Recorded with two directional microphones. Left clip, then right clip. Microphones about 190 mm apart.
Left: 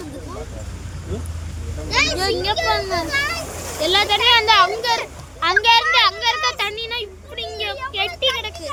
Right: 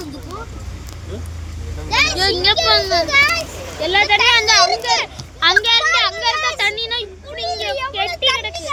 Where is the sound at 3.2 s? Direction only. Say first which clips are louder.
Right 8 dB; 60° right (ahead or behind).